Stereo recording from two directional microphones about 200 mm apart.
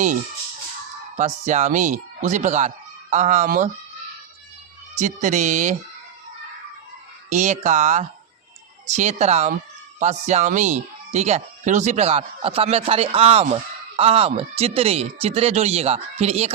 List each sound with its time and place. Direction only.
1.1 s speech: 35° right (ahead or behind)
4.9 s speech: 35° right (ahead or behind)
7.3 s speech: 35° right (ahead or behind)